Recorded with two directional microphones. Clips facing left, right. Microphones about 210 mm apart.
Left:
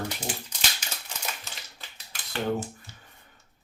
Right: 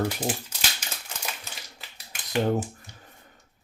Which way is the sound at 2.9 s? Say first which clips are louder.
Right 2 dB; 15° right (ahead or behind).